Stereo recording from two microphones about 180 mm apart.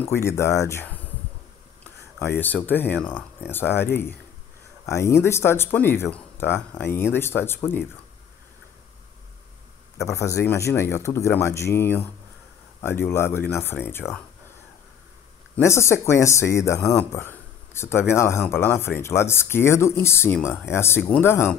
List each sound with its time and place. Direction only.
0.1 s speech: 15° left (ahead or behind)
2.1 s speech: 10° left (ahead or behind)
9.9 s speech: 15° left (ahead or behind)
15.5 s speech: 15° left (ahead or behind)